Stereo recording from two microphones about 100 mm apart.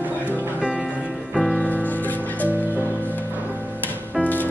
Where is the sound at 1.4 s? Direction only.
10° left (ahead or behind).